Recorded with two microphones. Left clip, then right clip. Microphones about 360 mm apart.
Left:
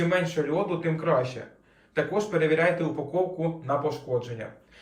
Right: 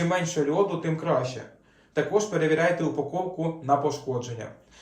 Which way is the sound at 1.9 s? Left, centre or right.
Centre.